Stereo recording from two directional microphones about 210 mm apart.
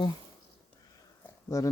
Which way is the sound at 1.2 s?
15° left (ahead or behind).